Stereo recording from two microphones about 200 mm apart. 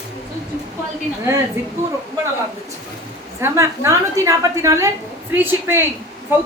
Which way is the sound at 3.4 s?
15° right (ahead or behind).